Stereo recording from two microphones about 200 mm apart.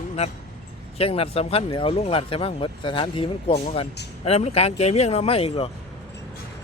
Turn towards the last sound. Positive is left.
turn(degrees=30)  # may be behind; listen again after turning